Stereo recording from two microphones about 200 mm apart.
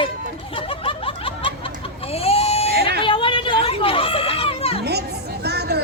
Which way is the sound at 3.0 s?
25° left (ahead or behind).